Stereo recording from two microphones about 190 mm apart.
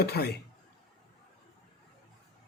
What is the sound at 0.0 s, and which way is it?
Speech, 55° left (ahead or behind).